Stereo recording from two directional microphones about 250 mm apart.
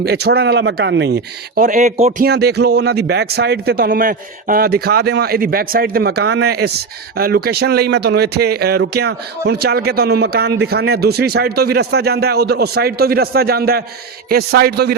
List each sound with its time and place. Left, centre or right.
0.0 s speech: right
2.2 s speech: right